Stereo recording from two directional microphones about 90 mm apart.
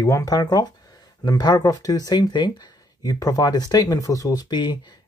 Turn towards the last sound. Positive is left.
turn(degrees=55)  # may be behind; listen again after turning